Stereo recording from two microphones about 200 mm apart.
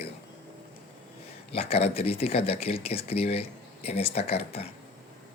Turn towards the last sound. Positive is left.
turn(degrees=30)  # may be behind; listen again after turning